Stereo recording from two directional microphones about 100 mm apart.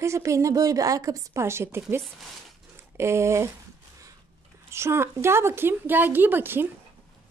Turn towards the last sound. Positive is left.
turn(degrees=-20)  # may be behind; listen again after turning